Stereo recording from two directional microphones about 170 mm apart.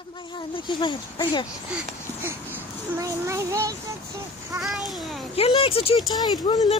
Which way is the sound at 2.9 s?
20° right (ahead or behind).